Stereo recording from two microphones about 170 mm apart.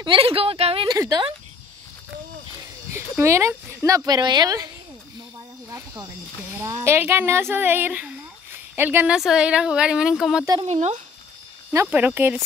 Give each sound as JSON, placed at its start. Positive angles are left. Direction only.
{"t": 0.0, "sound": "a sound", "side_deg": -30}
{"t": 0.9, "sound": "speech", "side_deg": -20}
{"t": 2.9, "sound": "speech", "side_deg": -15}
{"t": 5.7, "sound": "snake", "side_deg": -20}
{"t": 6.5, "sound": "speech", "side_deg": -15}
{"t": 10.6, "sound": "speech", "side_deg": -40}
{"t": 11.7, "sound": "speech", "side_deg": -15}